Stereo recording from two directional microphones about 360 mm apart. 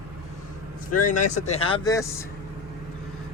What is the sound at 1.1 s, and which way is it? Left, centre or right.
Speech, centre.